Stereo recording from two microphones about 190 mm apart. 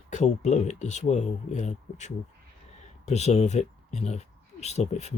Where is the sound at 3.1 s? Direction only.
35° left (ahead or behind).